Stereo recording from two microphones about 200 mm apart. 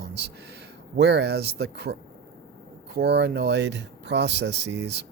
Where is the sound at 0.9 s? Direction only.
55° right (ahead or behind).